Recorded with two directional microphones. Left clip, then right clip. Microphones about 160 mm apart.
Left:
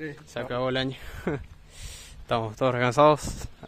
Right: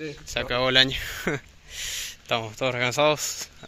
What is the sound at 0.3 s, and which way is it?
Speech, 10° left (ahead or behind).